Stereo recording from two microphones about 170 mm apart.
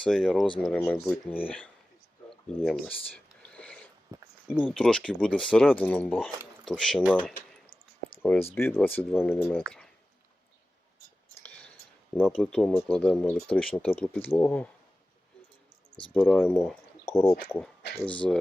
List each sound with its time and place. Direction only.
0.0 s speech: centre (ahead or behind)
2.6 s a sound: centre (ahead or behind)
4.1 s a sound: 20° right (ahead or behind)
4.5 s speech: centre (ahead or behind)
8.2 s speech: 10° left (ahead or behind)
9.0 s speech: centre (ahead or behind)
9.6 s a sound: 5° left (ahead or behind)
12.1 s speech: 5° left (ahead or behind)
16.1 s speech: 5° left (ahead or behind)